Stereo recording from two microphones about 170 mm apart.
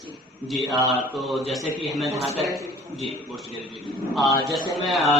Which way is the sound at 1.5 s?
Centre (ahead or behind).